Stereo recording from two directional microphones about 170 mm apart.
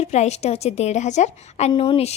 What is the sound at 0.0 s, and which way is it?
A woman's voice, 40° left (ahead or behind).